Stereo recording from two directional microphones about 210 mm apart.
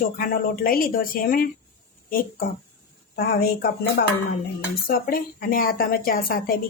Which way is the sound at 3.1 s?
45° left (ahead or behind).